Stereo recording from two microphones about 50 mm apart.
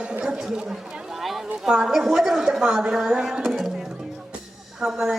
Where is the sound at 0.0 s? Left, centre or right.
Centre.